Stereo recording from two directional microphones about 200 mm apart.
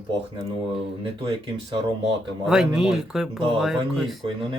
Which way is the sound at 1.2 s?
20° right (ahead or behind).